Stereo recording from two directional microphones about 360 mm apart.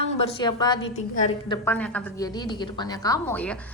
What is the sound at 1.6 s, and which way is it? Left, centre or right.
A woman's voice, centre.